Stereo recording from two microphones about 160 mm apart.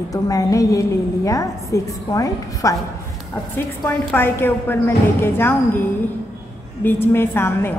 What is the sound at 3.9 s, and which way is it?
A woman's voice, 10° left (ahead or behind).